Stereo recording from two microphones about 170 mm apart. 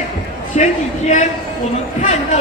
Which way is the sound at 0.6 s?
45° left (ahead or behind).